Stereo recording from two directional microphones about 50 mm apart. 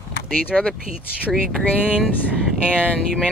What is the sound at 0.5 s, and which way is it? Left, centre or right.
Speech, centre.